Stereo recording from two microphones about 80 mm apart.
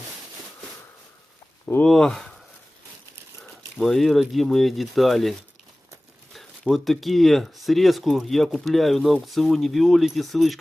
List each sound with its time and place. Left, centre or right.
1.6 s speech: left
1.9 s speech: centre
3.8 s speech: centre
6.3 s speech: centre